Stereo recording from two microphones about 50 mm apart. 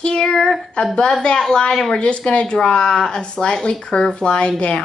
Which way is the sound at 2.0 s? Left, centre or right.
Left.